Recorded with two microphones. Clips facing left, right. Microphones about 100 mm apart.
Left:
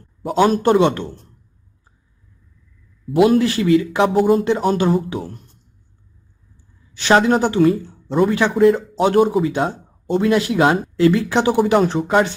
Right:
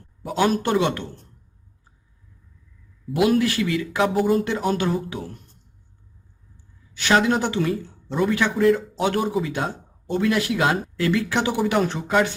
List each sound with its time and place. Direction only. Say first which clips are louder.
0.3 s speech: left 6 dB; 30° left (ahead or behind)
3.2 s a man's voice: left 5 dB; 30° left (ahead or behind)
6.9 s speech: left 5 dB; 35° left (ahead or behind)